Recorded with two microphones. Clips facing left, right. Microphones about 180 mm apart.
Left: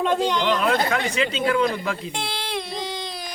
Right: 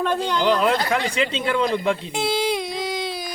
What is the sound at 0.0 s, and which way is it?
Speech, 20° left (ahead or behind).